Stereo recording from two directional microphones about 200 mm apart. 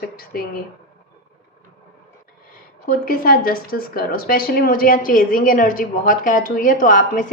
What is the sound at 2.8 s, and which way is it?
A woman's voice, 45° left (ahead or behind).